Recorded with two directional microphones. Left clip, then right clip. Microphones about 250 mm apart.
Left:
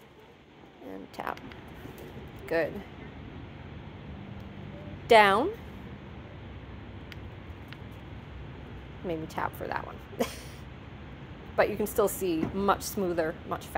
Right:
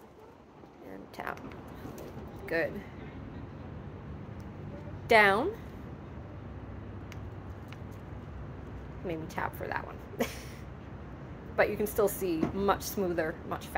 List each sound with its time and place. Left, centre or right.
1.2 s a woman's voice: left
2.4 s speech: left
5.0 s a woman's voice: left
9.0 s a woman's voice: left
11.5 s a woman's voice: left